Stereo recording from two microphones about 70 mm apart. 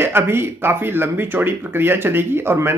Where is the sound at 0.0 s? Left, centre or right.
Right.